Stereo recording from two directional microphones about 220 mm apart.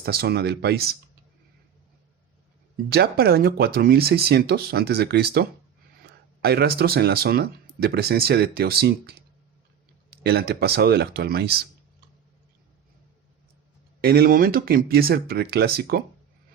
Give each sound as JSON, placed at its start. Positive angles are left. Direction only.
{"t": 0.0, "sound": "speech", "side_deg": -45}
{"t": 2.9, "sound": "speech", "side_deg": -45}
{"t": 14.0, "sound": "speech", "side_deg": -45}